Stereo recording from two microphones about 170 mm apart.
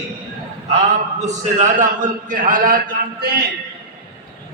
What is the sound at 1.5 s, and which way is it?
A man's voice, 45° right (ahead or behind).